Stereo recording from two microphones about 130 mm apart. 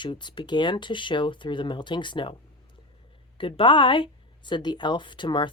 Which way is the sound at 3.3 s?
40° left (ahead or behind).